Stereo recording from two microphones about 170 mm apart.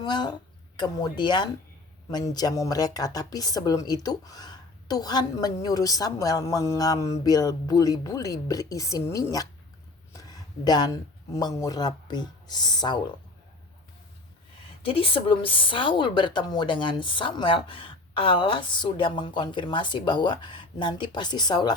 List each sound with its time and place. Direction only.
0.0 s a woman's voice: 25° left (ahead or behind)
14.8 s a woman's voice: 30° left (ahead or behind)